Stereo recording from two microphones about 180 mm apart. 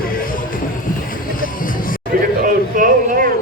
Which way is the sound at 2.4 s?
50° right (ahead or behind).